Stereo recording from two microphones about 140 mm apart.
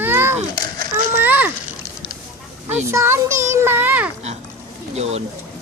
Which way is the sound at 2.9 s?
20° right (ahead or behind).